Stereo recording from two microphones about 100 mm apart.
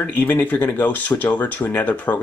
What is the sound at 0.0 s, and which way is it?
Speech, 15° left (ahead or behind).